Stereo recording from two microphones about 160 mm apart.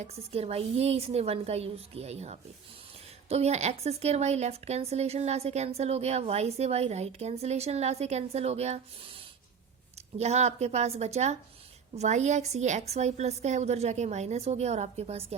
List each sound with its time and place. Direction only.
0.0 s speech: 40° right (ahead or behind)
10.2 s a woman's voice: 45° right (ahead or behind)